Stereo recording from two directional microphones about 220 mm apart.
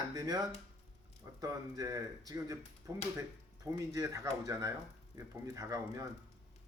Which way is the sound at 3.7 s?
15° right (ahead or behind).